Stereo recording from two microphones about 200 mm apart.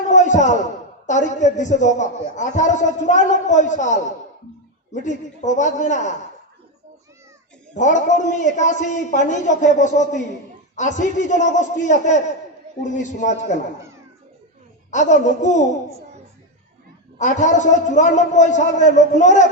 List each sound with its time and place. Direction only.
0.1 s a man's voice: 35° left (ahead or behind)
5.0 s a man's voice: 35° left (ahead or behind)
7.7 s a man's voice: 35° left (ahead or behind)
14.8 s a man's voice: 35° left (ahead or behind)
17.2 s a man's voice: 35° left (ahead or behind)